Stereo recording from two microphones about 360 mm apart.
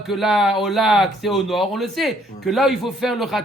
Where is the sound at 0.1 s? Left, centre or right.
Centre.